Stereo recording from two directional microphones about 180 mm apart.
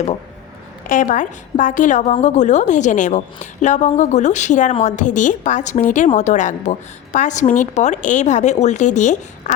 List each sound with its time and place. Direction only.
0.9 s a woman's voice: 45° left (ahead or behind)